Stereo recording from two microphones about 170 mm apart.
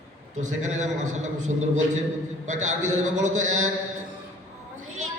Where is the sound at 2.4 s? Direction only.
45° right (ahead or behind).